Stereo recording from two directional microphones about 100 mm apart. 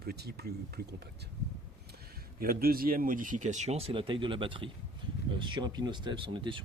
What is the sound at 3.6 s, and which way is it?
Speech, 85° right.